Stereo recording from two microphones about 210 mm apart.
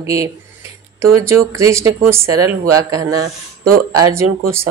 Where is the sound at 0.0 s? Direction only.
15° right (ahead or behind).